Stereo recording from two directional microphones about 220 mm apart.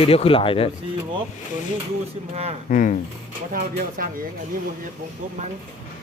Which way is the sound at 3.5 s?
40° right (ahead or behind).